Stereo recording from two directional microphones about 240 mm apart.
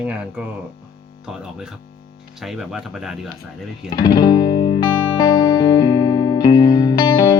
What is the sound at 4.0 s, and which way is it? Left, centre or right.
Music, centre.